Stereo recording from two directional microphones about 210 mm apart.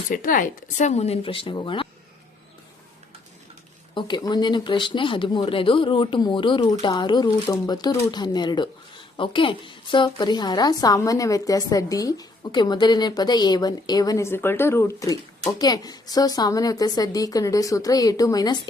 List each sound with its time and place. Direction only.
0.1 s speech: 40° left (ahead or behind); by 1.9 s 25° left (ahead or behind)
3.9 s a woman's voice: 20° left (ahead or behind)